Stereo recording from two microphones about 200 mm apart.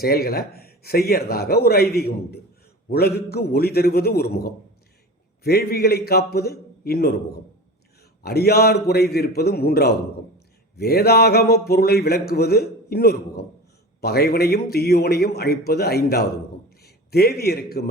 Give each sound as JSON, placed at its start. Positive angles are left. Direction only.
{"t": 0.0, "sound": "speech", "side_deg": 50}
{"t": 8.2, "sound": "a man's voice", "side_deg": 50}